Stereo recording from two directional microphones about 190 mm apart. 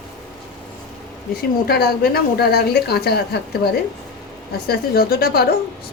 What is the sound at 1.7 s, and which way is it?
Speech, 55° left (ahead or behind).